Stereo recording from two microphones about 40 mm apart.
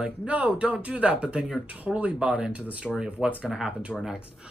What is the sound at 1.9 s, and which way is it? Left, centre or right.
Speech, centre.